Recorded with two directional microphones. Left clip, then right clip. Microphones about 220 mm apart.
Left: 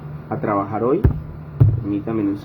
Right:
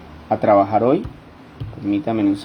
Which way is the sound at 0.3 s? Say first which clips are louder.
Right 7 dB; 40° right (ahead or behind).